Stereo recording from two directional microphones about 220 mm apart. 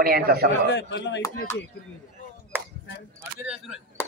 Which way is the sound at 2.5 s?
10° right (ahead or behind).